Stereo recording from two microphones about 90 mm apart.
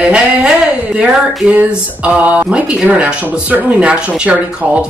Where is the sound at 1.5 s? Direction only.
15° right (ahead or behind).